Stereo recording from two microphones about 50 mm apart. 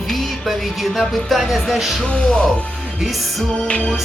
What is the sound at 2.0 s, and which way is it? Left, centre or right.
Music, centre.